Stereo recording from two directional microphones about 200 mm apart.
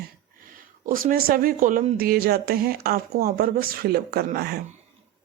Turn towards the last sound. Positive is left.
turn(degrees=-55)  # may be behind; listen again after turning